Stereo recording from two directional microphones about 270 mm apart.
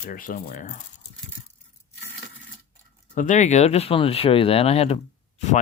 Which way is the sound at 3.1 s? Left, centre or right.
Left.